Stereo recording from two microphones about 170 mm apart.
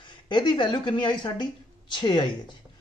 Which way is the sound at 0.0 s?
25° left (ahead or behind).